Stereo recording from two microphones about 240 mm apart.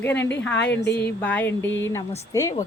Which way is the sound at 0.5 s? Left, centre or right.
Left.